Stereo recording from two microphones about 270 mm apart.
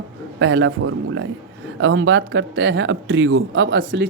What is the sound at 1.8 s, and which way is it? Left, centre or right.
Speech, right.